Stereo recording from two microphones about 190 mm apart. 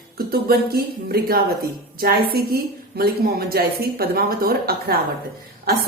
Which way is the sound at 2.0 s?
55° right (ahead or behind).